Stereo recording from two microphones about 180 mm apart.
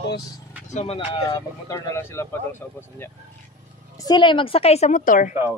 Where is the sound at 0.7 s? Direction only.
35° left (ahead or behind).